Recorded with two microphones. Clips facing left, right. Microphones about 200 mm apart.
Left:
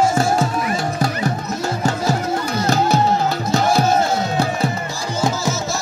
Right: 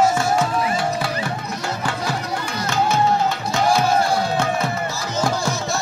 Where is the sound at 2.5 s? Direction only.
40° left (ahead or behind).